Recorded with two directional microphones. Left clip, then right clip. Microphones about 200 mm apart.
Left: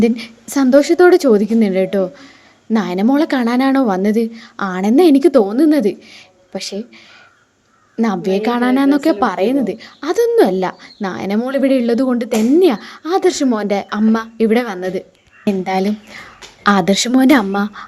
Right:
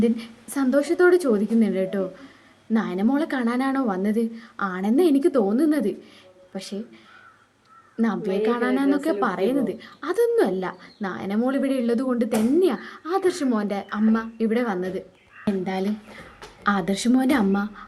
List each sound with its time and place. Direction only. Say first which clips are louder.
0.0 s a woman's voice: left 8 dB; 40° left (ahead or behind)
7.9 s a woman's voice: left 7 dB; 40° left (ahead or behind)